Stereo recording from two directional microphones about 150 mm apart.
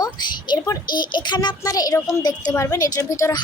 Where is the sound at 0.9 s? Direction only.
30° left (ahead or behind).